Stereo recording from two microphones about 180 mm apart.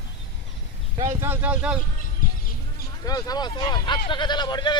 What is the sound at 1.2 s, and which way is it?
Speech, 10° right (ahead or behind).